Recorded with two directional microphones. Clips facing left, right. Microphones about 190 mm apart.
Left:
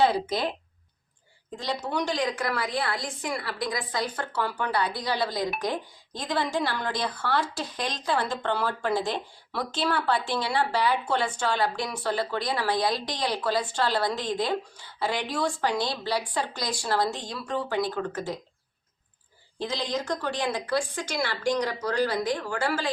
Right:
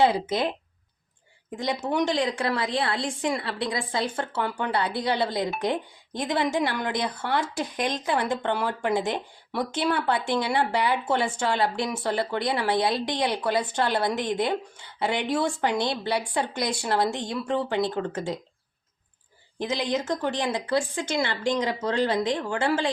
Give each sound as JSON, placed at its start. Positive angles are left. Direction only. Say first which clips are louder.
{"t": 0.0, "sound": "a woman's voice", "louder": "right 2 dB", "side_deg": -20}
{"t": 1.5, "sound": "a woman's voice", "louder": "right 4 dB", "side_deg": -20}
{"t": 19.5, "sound": "a woman's voice", "louder": "right 3 dB", "side_deg": -20}